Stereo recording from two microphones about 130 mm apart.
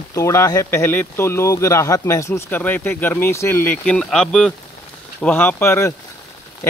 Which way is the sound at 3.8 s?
10° left (ahead or behind).